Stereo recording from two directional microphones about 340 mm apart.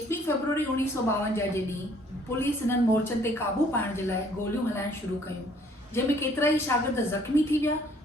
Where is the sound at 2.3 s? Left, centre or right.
Centre.